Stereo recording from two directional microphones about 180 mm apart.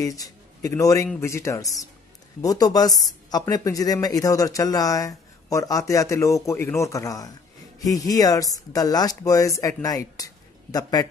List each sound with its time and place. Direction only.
0.0 s a woman's voice: 20° left (ahead or behind)